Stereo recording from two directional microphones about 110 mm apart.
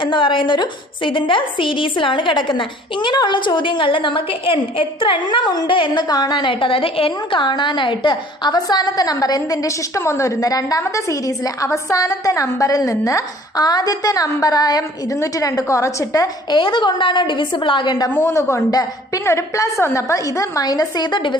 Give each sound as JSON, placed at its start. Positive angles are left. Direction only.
{"t": 0.0, "sound": "a woman's voice", "side_deg": 50}
{"t": 18.1, "sound": "a woman's voice", "side_deg": 20}